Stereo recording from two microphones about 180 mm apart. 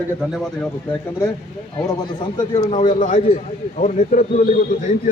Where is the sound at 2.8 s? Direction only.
45° left (ahead or behind).